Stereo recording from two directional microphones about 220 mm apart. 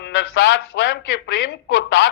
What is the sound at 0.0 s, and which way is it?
Speech, 55° left (ahead or behind).